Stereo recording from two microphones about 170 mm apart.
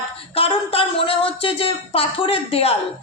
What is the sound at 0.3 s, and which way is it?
A woman's voice, 35° left (ahead or behind).